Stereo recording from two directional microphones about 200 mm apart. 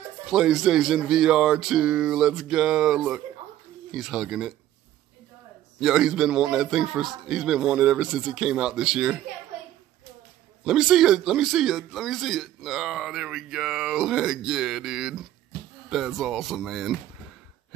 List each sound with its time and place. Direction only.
0.3 s speech: centre (ahead or behind)
5.8 s speech: 5° right (ahead or behind)
10.6 s speech: 5° right (ahead or behind)